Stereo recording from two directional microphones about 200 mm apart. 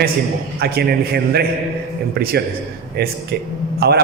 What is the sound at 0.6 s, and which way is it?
A man's voice, 50° right (ahead or behind).